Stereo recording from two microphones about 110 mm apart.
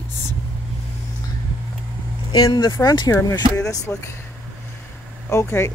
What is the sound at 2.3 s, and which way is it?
Speech, 35° left (ahead or behind).